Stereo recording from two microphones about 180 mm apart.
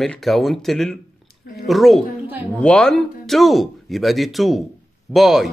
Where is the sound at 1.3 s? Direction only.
60° left (ahead or behind).